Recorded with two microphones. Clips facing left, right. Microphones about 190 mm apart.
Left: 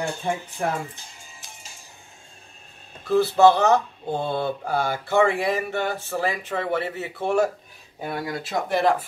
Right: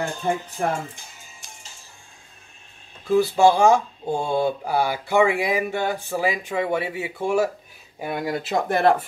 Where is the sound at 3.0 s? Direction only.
10° right (ahead or behind).